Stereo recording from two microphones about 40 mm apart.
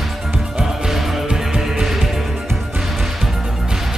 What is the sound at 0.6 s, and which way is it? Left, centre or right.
Music, centre.